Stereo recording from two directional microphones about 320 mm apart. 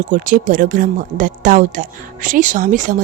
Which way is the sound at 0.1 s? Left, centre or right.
Right.